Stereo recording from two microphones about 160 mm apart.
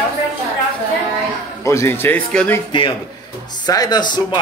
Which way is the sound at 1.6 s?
15° left (ahead or behind).